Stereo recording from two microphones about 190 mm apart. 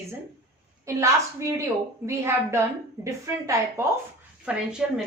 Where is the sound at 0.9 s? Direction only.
15° right (ahead or behind).